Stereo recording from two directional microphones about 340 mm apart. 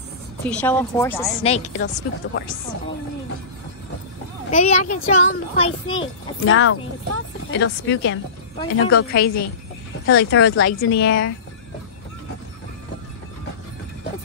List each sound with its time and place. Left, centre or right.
0.5 s speech: centre
1.4 s a child's voice: centre
4.5 s a child's voice: left
5.9 s speech: left